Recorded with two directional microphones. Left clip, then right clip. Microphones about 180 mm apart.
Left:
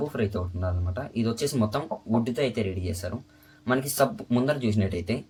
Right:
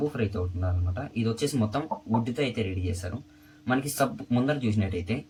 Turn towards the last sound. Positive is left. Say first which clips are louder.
# left 2 dB
turn(degrees=50)  # may be behind; listen again after turning